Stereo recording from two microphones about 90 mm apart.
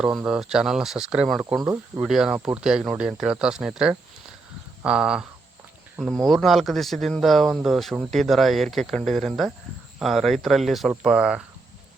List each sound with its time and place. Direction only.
0.0 s speech: 10° right (ahead or behind)
1.6 s speech: 25° right (ahead or behind)
2.0 s speech: 5° right (ahead or behind)
6.0 s speech: 5° left (ahead or behind)